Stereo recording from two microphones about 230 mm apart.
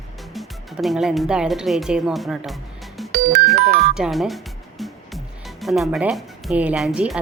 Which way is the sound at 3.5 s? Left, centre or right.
Right.